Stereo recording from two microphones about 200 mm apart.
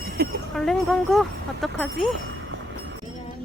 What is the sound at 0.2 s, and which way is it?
Speech, 50° right (ahead or behind).